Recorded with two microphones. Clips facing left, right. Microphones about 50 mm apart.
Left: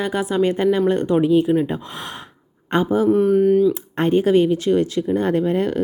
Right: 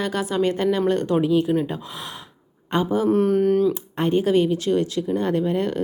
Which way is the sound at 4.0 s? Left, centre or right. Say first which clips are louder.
Left 3 dB; left.